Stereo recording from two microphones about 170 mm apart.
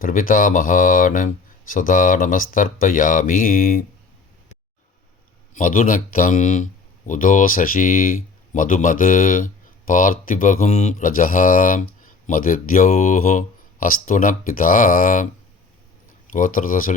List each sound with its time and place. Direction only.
0.0 s speech: 55° left (ahead or behind)
5.5 s speech: 50° left (ahead or behind)
16.3 s speech: 50° left (ahead or behind)